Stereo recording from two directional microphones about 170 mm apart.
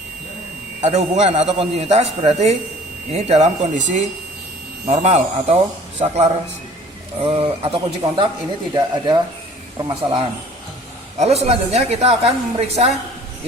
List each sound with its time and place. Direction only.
0.8 s a man's voice: 40° right (ahead or behind)
11.2 s a man's voice: 40° right (ahead or behind)